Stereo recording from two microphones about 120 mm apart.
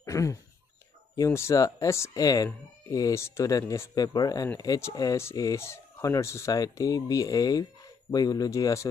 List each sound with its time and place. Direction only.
0.0 s speech: 25° left (ahead or behind)